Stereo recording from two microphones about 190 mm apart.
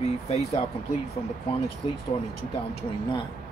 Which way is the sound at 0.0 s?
35° left (ahead or behind).